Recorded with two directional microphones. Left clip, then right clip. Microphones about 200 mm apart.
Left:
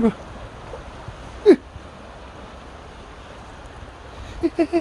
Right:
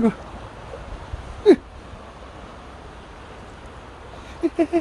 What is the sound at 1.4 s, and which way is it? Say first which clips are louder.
Speech: left 1 dB; centre (ahead or behind).